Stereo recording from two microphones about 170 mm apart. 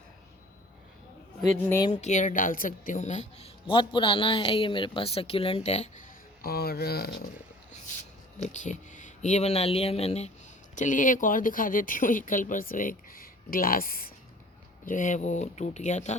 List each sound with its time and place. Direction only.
1.9 s a woman's voice: 45° left (ahead or behind)
6.4 s speech: 65° left (ahead or behind)
8.4 s a woman's voice: 45° left (ahead or behind)
10.8 s speech: 50° left (ahead or behind)
14.8 s speech: 50° left (ahead or behind)